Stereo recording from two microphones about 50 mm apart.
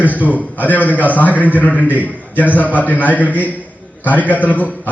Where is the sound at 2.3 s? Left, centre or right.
Left.